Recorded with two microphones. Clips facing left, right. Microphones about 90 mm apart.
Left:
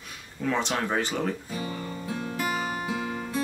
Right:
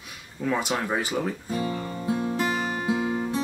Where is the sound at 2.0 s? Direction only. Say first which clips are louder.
Right 5 dB; 25° right (ahead or behind).